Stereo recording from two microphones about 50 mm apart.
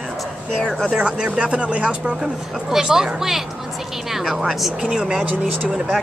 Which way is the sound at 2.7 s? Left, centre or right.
Centre.